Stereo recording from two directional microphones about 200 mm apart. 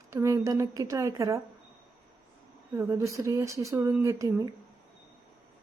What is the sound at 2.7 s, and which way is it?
Speech, 15° right (ahead or behind).